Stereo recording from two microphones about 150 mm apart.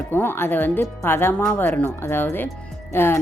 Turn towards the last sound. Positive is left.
turn(degrees=15)  # may be behind; listen again after turning